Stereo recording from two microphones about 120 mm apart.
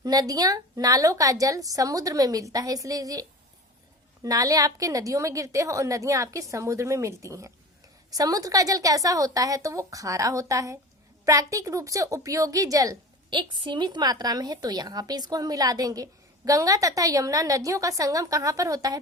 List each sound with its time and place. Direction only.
0.0 s a woman's voice: 30° right (ahead or behind)